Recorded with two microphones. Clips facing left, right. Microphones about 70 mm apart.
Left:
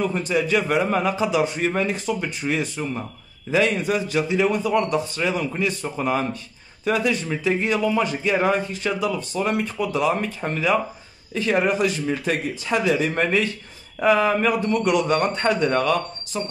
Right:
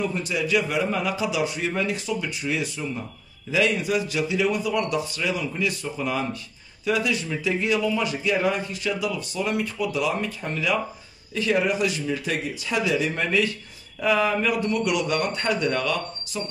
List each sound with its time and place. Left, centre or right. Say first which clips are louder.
0.1 s a man's voice: left 3 dB; left